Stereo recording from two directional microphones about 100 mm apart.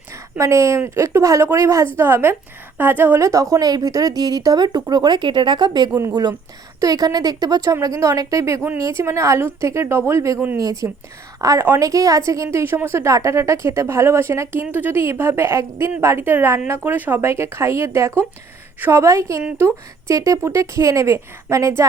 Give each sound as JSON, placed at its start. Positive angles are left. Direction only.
{"t": 0.3, "sound": "a woman's voice", "side_deg": -30}